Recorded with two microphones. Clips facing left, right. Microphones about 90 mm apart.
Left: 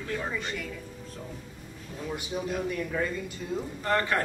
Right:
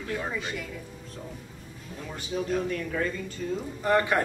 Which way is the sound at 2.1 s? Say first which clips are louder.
Right 4 dB; 10° left (ahead or behind).